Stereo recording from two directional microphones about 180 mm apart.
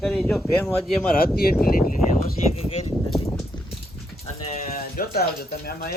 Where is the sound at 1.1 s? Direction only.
55° left (ahead or behind).